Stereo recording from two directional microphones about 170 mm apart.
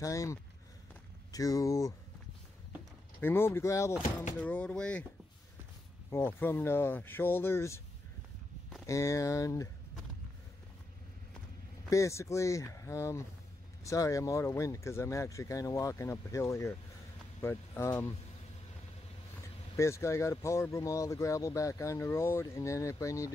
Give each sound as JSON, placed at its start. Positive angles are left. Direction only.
{"t": 0.0, "sound": "speech", "side_deg": 20}
{"t": 3.2, "sound": "speech", "side_deg": 10}
{"t": 6.0, "sound": "speech", "side_deg": 15}
{"t": 8.8, "sound": "speech", "side_deg": 20}
{"t": 11.9, "sound": "speech", "side_deg": 15}
{"t": 19.8, "sound": "speech", "side_deg": 15}